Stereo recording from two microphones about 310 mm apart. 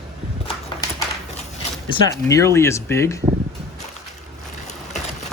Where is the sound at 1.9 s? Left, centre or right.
Centre.